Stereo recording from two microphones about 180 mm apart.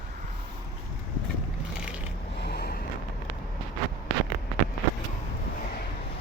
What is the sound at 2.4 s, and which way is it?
Vehicle, 65° left (ahead or behind).